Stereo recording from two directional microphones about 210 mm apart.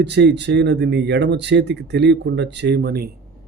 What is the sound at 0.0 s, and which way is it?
Speech, 55° right (ahead or behind).